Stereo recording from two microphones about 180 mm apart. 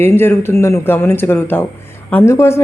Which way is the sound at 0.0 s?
15° left (ahead or behind).